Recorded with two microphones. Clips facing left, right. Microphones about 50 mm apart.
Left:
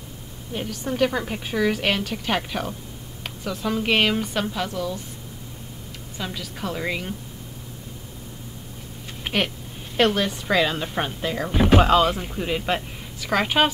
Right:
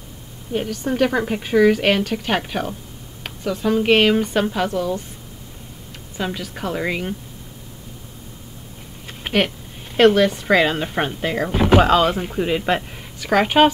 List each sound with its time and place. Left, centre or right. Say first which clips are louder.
0.5 s a woman's voice: right 6 dB; centre
0.9 s speech: right 4 dB; right
2.2 s a woman's voice: right 3 dB; centre
6.1 s speech: right 6 dB; centre
9.2 s a sound: right 5 dB; centre
9.9 s a woman's voice: right 7 dB; centre
11.8 s speech: right 2 dB; centre